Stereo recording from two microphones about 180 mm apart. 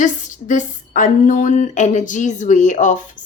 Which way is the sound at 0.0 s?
45° left (ahead or behind).